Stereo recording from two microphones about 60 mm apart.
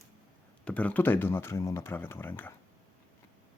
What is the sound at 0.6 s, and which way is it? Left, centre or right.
Speech, left.